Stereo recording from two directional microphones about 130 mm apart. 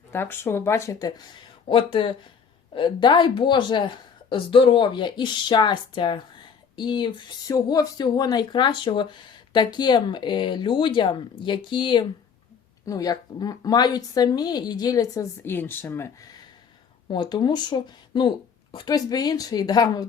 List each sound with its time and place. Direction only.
0.1 s speech: 15° left (ahead or behind)
1.6 s speech: 40° left (ahead or behind)
12.8 s speech: 25° left (ahead or behind)